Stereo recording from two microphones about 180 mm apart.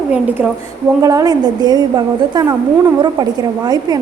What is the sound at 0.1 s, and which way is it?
Speech, 5° right (ahead or behind).